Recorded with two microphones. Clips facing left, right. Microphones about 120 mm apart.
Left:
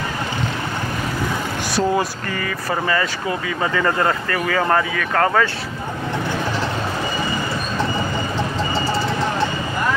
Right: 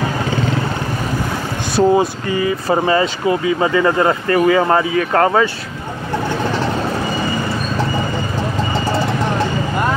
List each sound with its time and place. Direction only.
1.8 s speech: 15° right (ahead or behind)
2.7 s speech: 25° right (ahead or behind)